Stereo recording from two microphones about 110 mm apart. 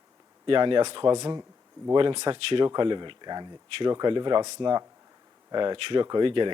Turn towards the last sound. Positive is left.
turn(degrees=-50)  # may be behind; listen again after turning